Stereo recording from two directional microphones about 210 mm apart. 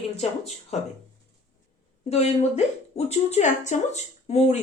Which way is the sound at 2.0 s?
30° left (ahead or behind).